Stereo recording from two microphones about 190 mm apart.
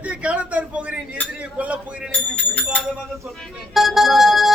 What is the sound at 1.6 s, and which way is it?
Speech, 5° right (ahead or behind).